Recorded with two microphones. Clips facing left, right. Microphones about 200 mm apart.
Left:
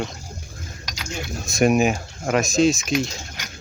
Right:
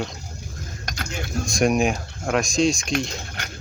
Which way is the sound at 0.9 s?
55° right (ahead or behind).